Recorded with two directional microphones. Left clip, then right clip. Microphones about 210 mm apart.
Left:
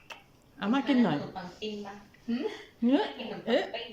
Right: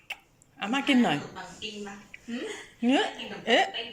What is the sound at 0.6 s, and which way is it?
Speech, 15° left (ahead or behind).